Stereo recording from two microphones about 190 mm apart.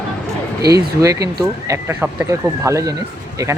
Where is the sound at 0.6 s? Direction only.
55° right (ahead or behind).